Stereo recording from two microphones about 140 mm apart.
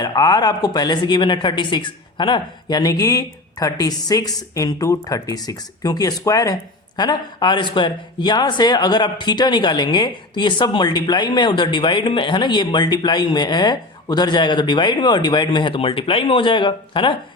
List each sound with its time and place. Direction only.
0.0 s speech: 30° left (ahead or behind)